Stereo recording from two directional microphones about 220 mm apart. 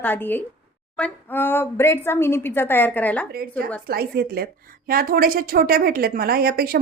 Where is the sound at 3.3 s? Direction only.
45° right (ahead or behind).